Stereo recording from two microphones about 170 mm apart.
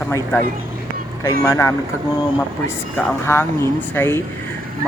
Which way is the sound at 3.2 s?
15° left (ahead or behind).